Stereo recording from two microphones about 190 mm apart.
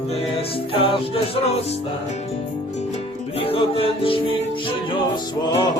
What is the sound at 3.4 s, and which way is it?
Music, 30° left (ahead or behind).